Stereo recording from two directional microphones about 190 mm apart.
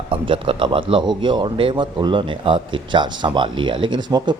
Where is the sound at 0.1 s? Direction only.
25° right (ahead or behind).